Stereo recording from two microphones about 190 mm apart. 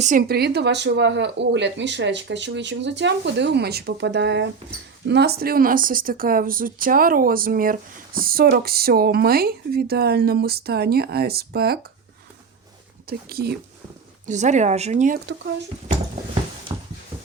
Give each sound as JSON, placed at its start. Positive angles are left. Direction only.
{"t": 0.0, "sound": "speech", "side_deg": -45}
{"t": 13.1, "sound": "speech", "side_deg": -55}
{"t": 14.3, "sound": "speech", "side_deg": -40}
{"t": 15.9, "sound": "a sound", "side_deg": -25}